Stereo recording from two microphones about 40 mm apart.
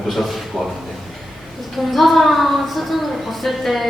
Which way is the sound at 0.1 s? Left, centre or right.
Centre.